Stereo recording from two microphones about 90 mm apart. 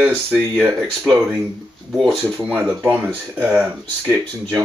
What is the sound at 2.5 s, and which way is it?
Speech, 15° right (ahead or behind).